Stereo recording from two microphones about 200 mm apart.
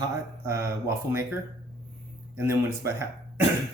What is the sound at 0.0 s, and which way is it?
Speech, 15° right (ahead or behind).